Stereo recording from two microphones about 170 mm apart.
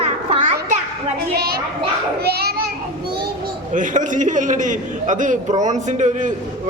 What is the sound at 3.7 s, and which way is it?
A man's voice, 50° right (ahead or behind).